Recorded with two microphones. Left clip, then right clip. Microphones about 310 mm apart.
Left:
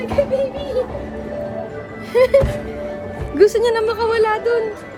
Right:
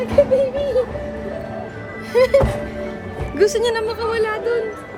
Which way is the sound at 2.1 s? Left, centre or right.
Centre.